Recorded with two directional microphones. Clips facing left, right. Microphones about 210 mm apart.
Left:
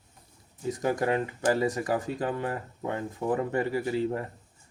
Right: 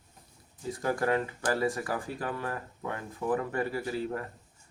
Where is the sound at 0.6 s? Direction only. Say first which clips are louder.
Left 2 dB; 20° left (ahead or behind).